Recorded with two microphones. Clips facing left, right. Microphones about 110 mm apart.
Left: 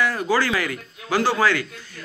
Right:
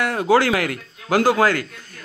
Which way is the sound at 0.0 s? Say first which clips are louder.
Right 4 dB; 65° right (ahead or behind).